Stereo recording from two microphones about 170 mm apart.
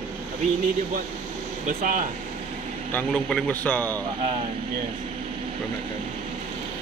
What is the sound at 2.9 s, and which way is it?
A man's voice, 5° left (ahead or behind).